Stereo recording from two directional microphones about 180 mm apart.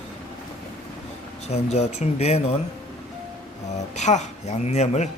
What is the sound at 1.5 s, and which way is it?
Speech, 35° left (ahead or behind).